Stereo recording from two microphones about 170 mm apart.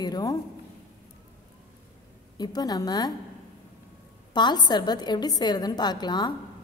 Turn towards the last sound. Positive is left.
turn(degrees=25)  # may be behind; listen again after turning